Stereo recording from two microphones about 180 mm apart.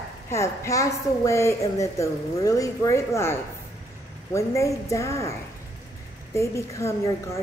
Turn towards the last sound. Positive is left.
turn(degrees=15)  # may be behind; listen again after turning